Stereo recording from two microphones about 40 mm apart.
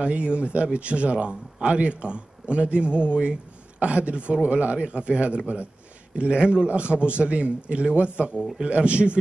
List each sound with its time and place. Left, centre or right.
0.0 s a man's voice: right
8.4 s a man's voice: centre
8.6 s speech: right